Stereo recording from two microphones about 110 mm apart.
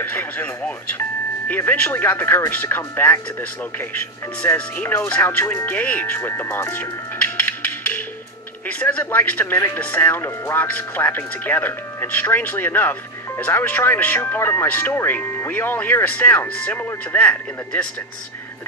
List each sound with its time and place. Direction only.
0.0 s speech: 15° left (ahead or behind)